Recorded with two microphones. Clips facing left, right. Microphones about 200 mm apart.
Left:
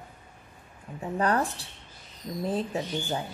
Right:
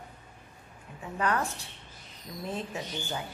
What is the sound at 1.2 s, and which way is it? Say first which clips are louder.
A woman's voice: left 3 dB; 35° left (ahead or behind).